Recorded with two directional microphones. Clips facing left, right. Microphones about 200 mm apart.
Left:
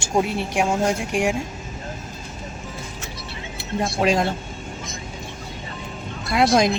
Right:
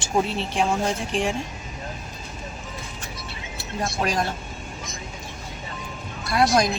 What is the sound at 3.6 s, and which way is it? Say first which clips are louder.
Speech: left 4 dB; 25° left (ahead or behind).